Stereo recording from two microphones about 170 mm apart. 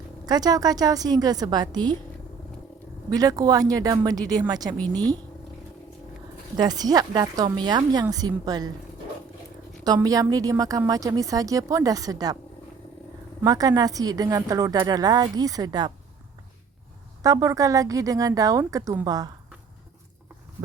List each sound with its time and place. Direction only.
0.3 s a woman's voice: 25° right (ahead or behind)
3.1 s a woman's voice: 20° right (ahead or behind)
6.6 s a woman's voice: 25° right (ahead or behind)
9.8 s a woman's voice: 20° right (ahead or behind)
13.4 s a woman's voice: 20° right (ahead or behind)
17.2 s a woman's voice: 20° right (ahead or behind)